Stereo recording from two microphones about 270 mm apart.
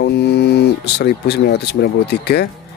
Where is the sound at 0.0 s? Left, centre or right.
Left.